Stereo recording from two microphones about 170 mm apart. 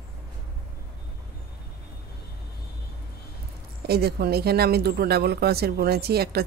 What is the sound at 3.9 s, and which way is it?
Speech, 70° right (ahead or behind).